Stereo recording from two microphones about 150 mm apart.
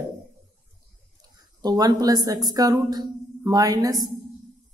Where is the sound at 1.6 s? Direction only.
25° right (ahead or behind).